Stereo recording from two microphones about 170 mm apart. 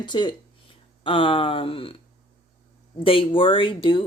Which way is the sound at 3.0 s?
30° left (ahead or behind).